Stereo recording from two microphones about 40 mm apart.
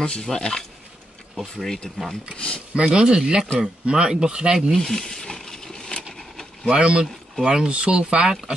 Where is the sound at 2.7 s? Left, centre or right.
Right.